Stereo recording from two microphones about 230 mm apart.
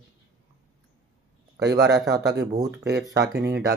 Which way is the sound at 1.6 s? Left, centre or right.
Right.